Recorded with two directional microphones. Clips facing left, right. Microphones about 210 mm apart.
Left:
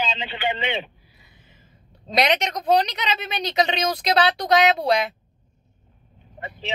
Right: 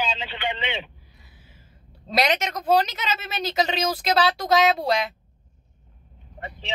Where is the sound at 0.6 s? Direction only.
50° left (ahead or behind).